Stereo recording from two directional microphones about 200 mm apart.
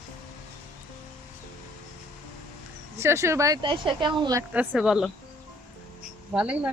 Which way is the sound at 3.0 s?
15° right (ahead or behind).